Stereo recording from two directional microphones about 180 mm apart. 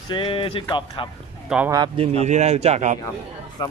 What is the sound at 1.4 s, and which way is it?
Speech, 5° right (ahead or behind).